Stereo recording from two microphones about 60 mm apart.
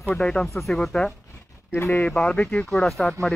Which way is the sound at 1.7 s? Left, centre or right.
Left.